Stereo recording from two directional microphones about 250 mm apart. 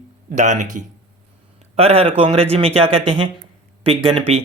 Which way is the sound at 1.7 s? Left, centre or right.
Right.